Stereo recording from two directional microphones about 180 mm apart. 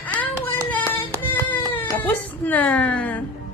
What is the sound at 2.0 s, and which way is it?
A woman's voice, 10° left (ahead or behind).